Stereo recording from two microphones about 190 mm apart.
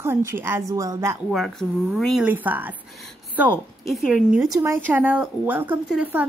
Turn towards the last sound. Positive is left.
turn(degrees=-5)  # may be behind; listen again after turning